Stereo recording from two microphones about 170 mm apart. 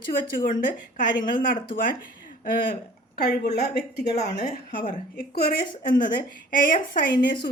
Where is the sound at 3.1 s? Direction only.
75° left (ahead or behind).